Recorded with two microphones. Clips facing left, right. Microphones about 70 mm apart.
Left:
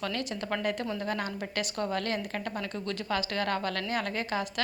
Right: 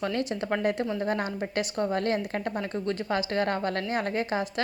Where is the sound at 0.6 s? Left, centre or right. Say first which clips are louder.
Right 4 dB; right.